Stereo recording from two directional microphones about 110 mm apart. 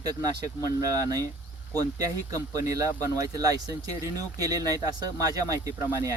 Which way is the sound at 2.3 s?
30° right (ahead or behind).